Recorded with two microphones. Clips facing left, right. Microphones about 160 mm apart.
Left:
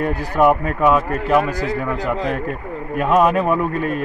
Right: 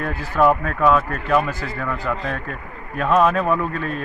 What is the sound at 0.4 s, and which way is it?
Speech, 10° left (ahead or behind).